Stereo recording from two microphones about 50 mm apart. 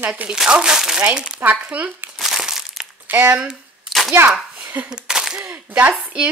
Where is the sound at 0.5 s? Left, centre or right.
Centre.